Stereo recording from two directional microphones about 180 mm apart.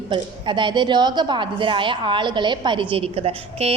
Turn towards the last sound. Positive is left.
turn(degrees=-35)  # may be behind; listen again after turning